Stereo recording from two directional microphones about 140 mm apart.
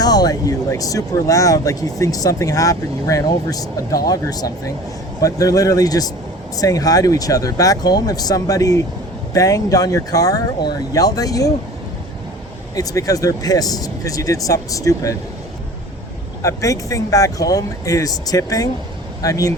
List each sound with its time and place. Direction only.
0.0 s speech: 30° left (ahead or behind)
12.7 s speech: 25° left (ahead or behind)
16.4 s speech: 20° left (ahead or behind)